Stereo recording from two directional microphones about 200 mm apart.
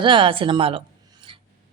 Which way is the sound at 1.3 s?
25° right (ahead or behind).